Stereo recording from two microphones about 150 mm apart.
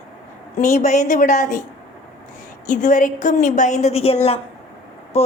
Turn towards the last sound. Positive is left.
turn(degrees=45)  # may be behind; listen again after turning